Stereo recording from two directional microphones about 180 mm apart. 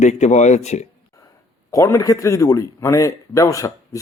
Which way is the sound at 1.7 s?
15° left (ahead or behind).